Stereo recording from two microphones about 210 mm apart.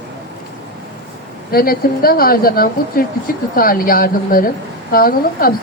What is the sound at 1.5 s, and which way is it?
A woman's voice, 45° left (ahead or behind).